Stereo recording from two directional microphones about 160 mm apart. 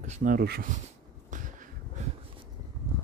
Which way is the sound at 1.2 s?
55° right (ahead or behind).